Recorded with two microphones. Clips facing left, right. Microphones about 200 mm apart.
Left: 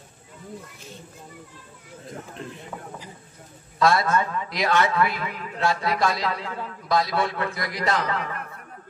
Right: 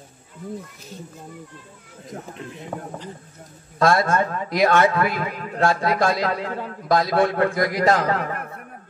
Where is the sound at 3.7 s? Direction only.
50° right (ahead or behind).